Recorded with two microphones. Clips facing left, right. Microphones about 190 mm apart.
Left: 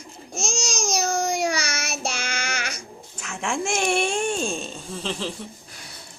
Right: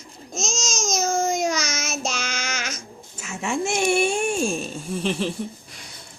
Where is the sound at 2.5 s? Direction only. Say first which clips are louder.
Even; 60° left (ahead or behind).